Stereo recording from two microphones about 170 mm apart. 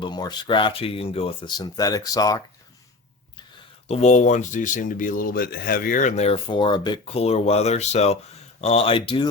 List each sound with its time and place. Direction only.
0.0 s speech: 25° left (ahead or behind)
3.8 s speech: 40° left (ahead or behind)